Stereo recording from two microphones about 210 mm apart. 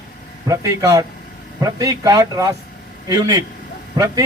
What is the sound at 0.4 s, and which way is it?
A man's voice, 15° right (ahead or behind).